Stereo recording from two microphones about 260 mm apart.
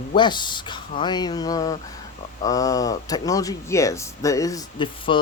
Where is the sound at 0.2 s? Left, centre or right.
Centre.